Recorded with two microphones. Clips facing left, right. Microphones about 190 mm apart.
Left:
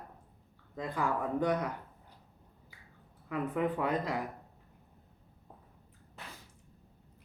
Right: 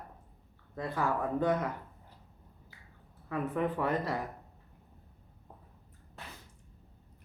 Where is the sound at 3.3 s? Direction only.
15° left (ahead or behind).